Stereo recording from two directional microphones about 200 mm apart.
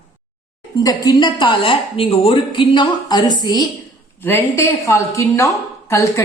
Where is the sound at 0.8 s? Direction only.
20° left (ahead or behind).